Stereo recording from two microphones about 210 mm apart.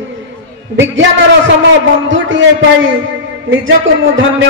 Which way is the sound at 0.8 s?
60° right (ahead or behind).